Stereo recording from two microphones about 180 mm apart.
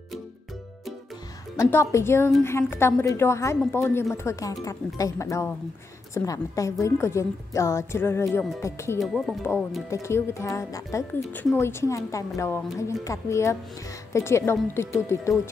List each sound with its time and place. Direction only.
1.6 s a woman's voice: 15° left (ahead or behind)
9.0 s speech: centre (ahead or behind)
10.0 s a woman's voice: 15° left (ahead or behind)